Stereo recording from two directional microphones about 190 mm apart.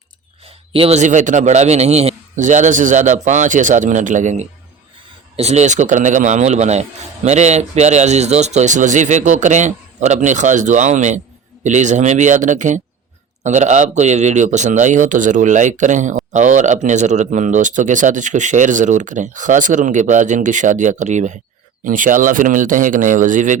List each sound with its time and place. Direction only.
0.4 s a man's voice: 30° right (ahead or behind)